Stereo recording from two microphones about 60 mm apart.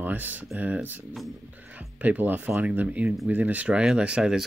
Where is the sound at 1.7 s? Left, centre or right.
Right.